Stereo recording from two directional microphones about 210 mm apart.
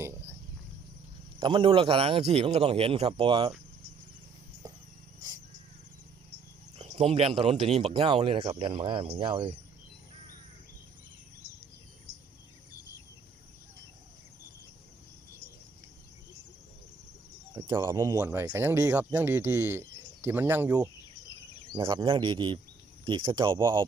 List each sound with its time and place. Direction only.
0.0 s a sound: 10° right (ahead or behind)
1.4 s speech: 25° right (ahead or behind)
6.7 s speech: 30° right (ahead or behind)
17.7 s speech: 15° right (ahead or behind)